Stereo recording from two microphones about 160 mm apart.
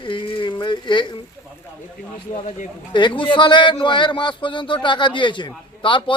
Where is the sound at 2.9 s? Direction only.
30° left (ahead or behind).